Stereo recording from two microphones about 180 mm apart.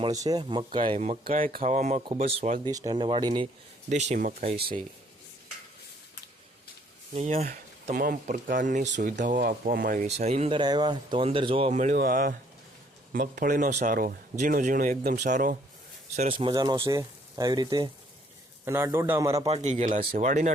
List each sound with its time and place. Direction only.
0.0 s speech: 20° right (ahead or behind)
1.3 s speech: 45° right (ahead or behind)
2.0 s speech: 30° right (ahead or behind)
2.6 s speech: 20° right (ahead or behind)
3.8 s speech: 40° right (ahead or behind)
7.1 s speech: 35° right (ahead or behind)
10.6 s speech: 25° right (ahead or behind)
11.8 s speech: 50° right (ahead or behind)
16.3 s a man's voice: 25° right (ahead or behind)
19.5 s speech: 35° right (ahead or behind)